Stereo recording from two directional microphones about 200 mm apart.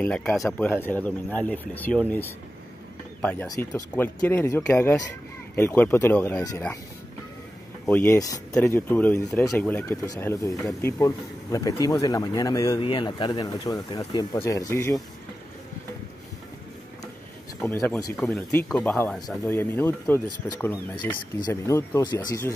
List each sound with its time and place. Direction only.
0.0 s speech: 5° left (ahead or behind)
3.2 s speech: 5° left (ahead or behind)
7.8 s speech: 10° left (ahead or behind)
17.6 s speech: 10° left (ahead or behind)